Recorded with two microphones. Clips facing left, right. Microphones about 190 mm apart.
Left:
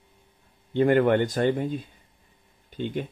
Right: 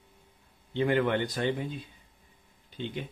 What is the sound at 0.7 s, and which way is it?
Speech, 50° left (ahead or behind).